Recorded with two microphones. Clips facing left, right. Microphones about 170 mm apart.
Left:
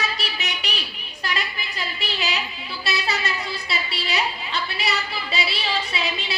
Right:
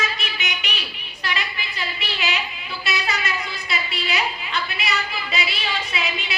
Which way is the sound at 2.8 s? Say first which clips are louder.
Even; 35° left (ahead or behind).